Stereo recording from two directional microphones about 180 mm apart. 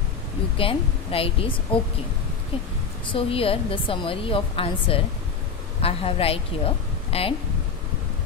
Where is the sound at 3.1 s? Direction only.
30° left (ahead or behind).